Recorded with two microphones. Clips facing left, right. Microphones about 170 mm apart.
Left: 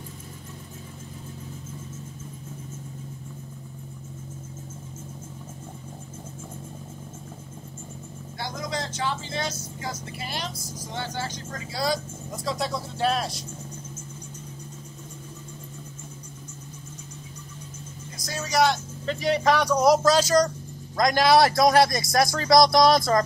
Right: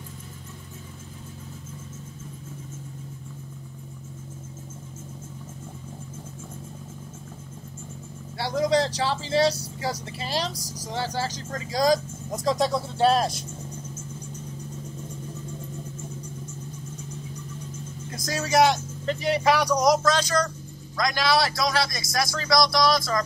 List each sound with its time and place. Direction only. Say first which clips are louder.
8.4 s speech: right 9 dB; 30° right (ahead or behind)
19.0 s speech: even; 10° right (ahead or behind)
19.7 s speech: left 2 dB; 5° left (ahead or behind)
20.1 s a man's voice: left 4 dB; 40° left (ahead or behind); by 23.2 s 55° left (ahead or behind)